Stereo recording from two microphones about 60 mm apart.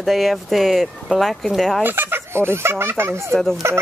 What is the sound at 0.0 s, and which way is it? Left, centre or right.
Speech, centre.